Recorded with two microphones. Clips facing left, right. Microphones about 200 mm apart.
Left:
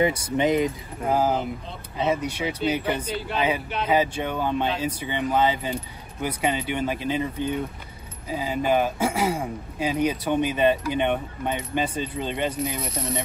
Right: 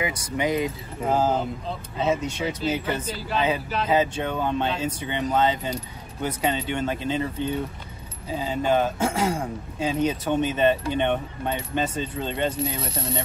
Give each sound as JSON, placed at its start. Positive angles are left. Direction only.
{"t": 0.0, "sound": "speech", "side_deg": 25}
{"t": 1.0, "sound": "a man's voice", "side_deg": 10}
{"t": 12.5, "sound": "speech", "side_deg": -30}